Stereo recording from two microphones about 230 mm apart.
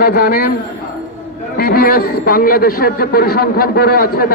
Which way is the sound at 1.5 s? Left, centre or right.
Left.